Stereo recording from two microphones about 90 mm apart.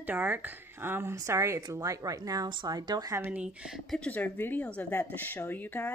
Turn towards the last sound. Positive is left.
turn(degrees=20)  # may be behind; listen again after turning